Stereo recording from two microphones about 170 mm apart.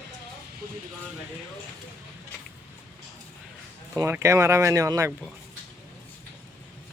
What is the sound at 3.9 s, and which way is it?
Speech, 15° right (ahead or behind).